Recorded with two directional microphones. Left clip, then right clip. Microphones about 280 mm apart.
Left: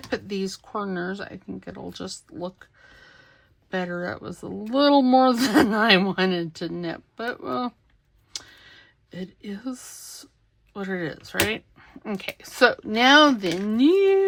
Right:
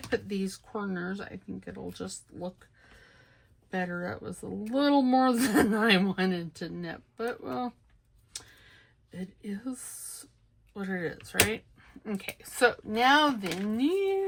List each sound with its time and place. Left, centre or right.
0.3 s speech: centre
3.7 s speech: centre
9.0 s speech: centre